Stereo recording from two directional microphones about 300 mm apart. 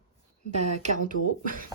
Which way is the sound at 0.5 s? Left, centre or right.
Right.